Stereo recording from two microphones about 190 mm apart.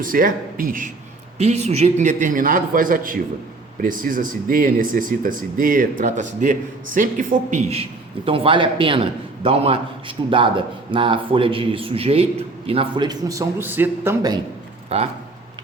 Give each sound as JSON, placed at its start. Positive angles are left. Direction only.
{"t": 0.0, "sound": "speech", "side_deg": -45}
{"t": 1.4, "sound": "a man's voice", "side_deg": -35}
{"t": 14.9, "sound": "speech", "side_deg": -30}